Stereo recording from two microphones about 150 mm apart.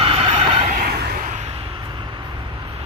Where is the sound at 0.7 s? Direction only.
85° right.